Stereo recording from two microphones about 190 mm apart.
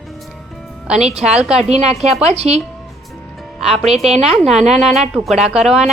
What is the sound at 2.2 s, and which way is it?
Speech, 35° right (ahead or behind).